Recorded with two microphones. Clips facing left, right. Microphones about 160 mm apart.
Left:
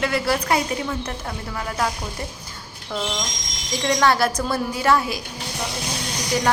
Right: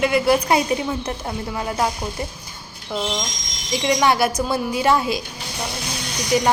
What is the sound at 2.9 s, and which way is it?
A woman's voice, 10° right (ahead or behind).